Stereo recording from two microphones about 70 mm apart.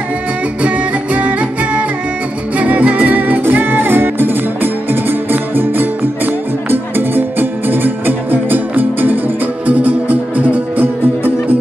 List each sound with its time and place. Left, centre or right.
0.6 s music: right